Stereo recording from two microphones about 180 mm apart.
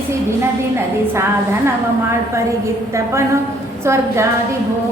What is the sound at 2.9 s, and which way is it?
A woman's voice, 15° right (ahead or behind).